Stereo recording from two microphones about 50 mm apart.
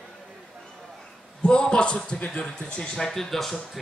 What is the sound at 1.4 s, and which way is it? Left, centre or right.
A man's voice, centre.